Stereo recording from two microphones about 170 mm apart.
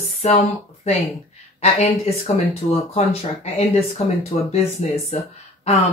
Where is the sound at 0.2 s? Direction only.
40° left (ahead or behind).